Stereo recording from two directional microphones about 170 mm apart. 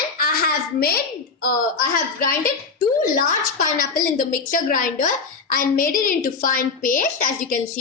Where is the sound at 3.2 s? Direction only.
50° left (ahead or behind).